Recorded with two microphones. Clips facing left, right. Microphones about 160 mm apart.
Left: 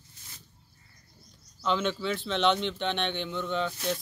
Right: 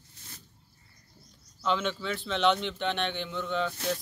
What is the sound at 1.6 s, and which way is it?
Speech, centre (ahead or behind).